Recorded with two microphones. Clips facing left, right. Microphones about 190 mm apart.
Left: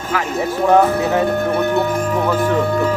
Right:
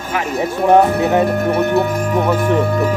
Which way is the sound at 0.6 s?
20° right (ahead or behind).